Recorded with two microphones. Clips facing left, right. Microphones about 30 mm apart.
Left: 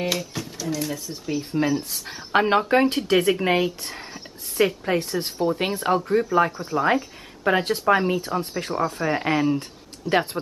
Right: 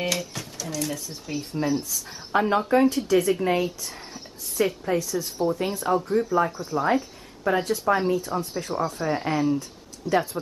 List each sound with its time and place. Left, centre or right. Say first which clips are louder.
0.2 s speech: left 3 dB; centre
1.7 s speech: left 1 dB; left
6.5 s speech: left 2 dB; left
6.8 s speech: left 2 dB; left
8.1 s speech: left 1 dB; left